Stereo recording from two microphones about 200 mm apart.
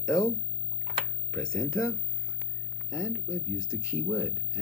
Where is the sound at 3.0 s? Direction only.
10° right (ahead or behind).